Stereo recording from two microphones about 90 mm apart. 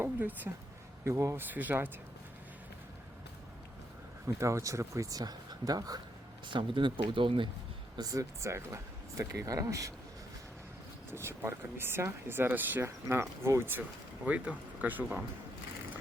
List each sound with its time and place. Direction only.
0.0 s speech: 20° right (ahead or behind)
1.0 s speech: 30° right (ahead or behind)
1.5 s speech: 20° right (ahead or behind)
4.4 s speech: 35° right (ahead or behind)
6.5 s speech: 65° right (ahead or behind)
7.9 s speech: 40° right (ahead or behind)
11.1 s speech: 30° right (ahead or behind)
14.3 s speech: 15° right (ahead or behind)